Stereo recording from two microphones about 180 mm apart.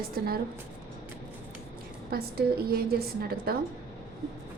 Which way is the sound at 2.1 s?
55° right (ahead or behind).